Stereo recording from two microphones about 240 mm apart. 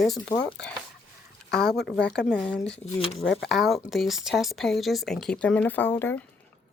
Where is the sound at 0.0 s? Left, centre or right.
Centre.